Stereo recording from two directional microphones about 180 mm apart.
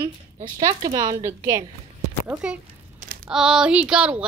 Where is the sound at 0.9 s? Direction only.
25° right (ahead or behind).